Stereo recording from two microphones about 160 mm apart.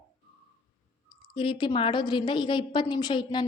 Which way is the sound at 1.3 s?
30° left (ahead or behind).